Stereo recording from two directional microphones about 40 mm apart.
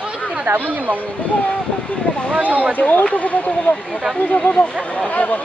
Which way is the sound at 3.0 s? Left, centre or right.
Left.